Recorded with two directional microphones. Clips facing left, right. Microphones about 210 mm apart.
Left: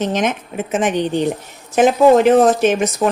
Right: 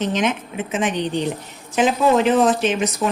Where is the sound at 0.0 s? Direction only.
45° left (ahead or behind).